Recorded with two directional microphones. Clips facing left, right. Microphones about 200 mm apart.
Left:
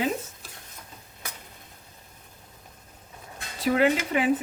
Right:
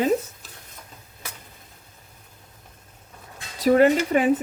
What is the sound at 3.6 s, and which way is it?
Speech, 40° right (ahead or behind).